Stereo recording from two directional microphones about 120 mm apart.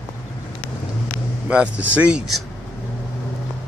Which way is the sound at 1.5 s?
10° right (ahead or behind).